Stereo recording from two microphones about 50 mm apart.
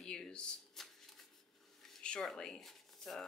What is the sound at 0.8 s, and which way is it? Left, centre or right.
Shuffling cards, centre.